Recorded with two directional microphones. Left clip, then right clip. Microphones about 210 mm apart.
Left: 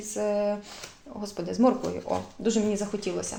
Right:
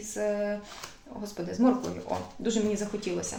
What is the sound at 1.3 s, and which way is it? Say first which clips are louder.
Speech: left 3 dB; 30° left (ahead or behind).